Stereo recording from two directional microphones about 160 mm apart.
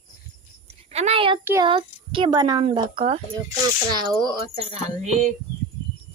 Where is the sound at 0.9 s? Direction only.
40° right (ahead or behind).